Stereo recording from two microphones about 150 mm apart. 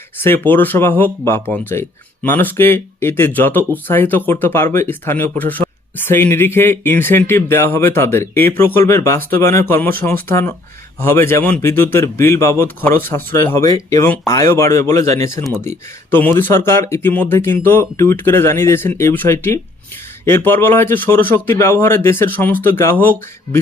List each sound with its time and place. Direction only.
0.2 s speech: 15° left (ahead or behind)